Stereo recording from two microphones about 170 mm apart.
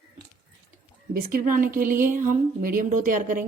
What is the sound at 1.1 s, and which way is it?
A woman's voice, 55° right (ahead or behind).